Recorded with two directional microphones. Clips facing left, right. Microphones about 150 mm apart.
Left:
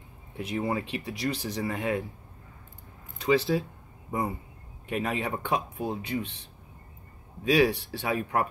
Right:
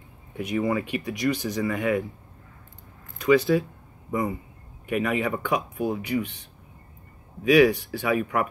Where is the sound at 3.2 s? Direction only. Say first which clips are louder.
Right 5 dB; 30° left (ahead or behind).